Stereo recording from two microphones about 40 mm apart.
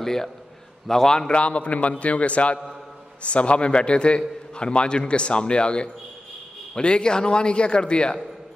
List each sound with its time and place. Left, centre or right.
0.0 s a man's voice: centre